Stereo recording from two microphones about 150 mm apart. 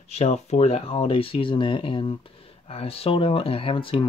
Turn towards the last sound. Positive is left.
turn(degrees=35)  # may be behind; listen again after turning